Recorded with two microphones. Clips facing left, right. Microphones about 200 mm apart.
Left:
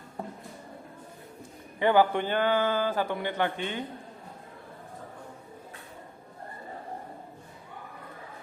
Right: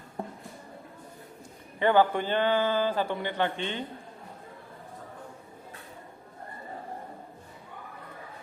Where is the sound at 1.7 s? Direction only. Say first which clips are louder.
Even; 10° left (ahead or behind).